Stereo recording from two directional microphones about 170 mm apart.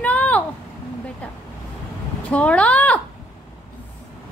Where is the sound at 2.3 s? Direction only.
5° left (ahead or behind).